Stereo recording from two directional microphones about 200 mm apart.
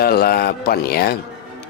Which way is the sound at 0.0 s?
50° left (ahead or behind).